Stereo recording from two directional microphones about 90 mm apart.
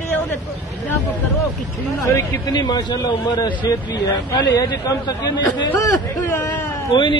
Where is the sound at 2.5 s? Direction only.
50° left (ahead or behind).